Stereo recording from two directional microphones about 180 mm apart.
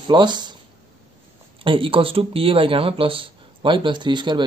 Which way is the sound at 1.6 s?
30° right (ahead or behind).